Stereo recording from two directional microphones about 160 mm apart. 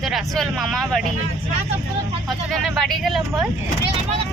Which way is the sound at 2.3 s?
Centre (ahead or behind).